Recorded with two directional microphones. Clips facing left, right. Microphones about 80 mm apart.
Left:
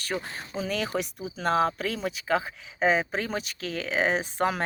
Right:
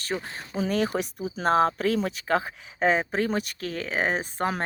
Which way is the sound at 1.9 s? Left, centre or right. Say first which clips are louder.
Right 2 dB; right.